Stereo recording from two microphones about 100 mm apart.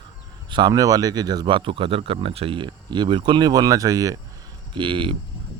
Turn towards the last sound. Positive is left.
turn(degrees=-55)  # may be behind; listen again after turning